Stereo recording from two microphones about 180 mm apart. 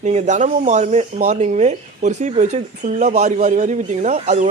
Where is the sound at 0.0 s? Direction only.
40° right (ahead or behind).